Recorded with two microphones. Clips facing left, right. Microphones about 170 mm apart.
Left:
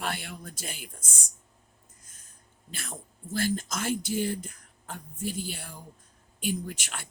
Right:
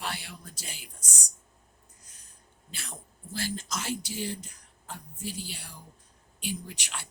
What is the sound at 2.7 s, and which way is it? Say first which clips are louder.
Speech: left 4 dB; 50° left (ahead or behind).